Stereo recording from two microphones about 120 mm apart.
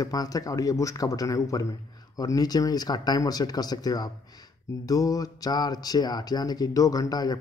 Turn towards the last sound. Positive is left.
turn(degrees=30)  # may be behind; listen again after turning